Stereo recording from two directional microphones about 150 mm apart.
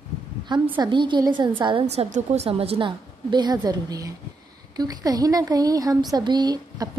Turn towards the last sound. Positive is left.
turn(degrees=-25)  # may be behind; listen again after turning